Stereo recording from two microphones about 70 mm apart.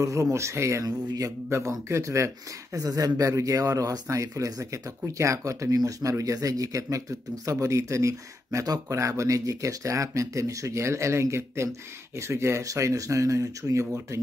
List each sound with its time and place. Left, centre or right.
0.0 s speech: right
0.8 s speech: right
1.5 s speech: right
2.8 s speech: right